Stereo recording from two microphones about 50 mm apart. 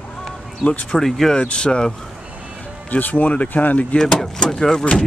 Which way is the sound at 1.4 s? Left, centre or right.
Left.